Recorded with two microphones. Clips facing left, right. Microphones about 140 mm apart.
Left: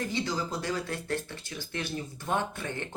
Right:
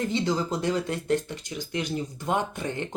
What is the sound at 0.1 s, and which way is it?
Speech, 25° right (ahead or behind).